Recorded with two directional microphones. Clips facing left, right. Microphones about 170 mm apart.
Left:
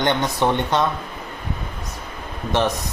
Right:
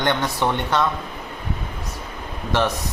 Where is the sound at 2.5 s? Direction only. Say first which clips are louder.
Left 1 dB; 15° left (ahead or behind).